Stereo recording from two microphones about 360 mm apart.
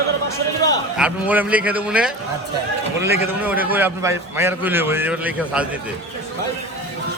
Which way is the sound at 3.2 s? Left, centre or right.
Centre.